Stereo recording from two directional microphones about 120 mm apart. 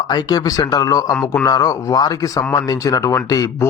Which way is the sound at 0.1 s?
35° left (ahead or behind).